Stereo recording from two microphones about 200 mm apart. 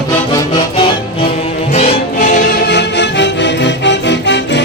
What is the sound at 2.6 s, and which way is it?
Music, 60° left (ahead or behind).